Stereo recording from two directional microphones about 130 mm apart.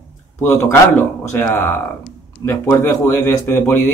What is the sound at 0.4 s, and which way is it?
A man's voice, 15° left (ahead or behind).